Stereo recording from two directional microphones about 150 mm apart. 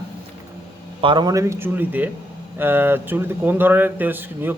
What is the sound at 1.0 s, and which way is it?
A man's voice, 35° right (ahead or behind).